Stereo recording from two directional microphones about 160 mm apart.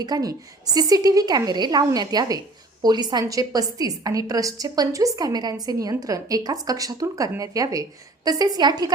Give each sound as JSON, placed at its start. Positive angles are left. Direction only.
{"t": 0.0, "sound": "a woman's voice", "side_deg": -25}